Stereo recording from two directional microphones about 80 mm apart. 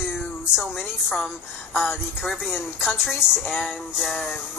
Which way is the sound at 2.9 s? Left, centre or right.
Left.